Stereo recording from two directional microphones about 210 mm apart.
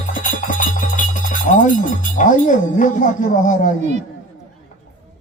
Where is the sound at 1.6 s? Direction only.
40° left (ahead or behind).